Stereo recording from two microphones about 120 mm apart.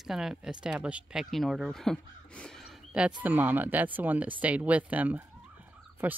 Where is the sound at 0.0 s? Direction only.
5° right (ahead or behind).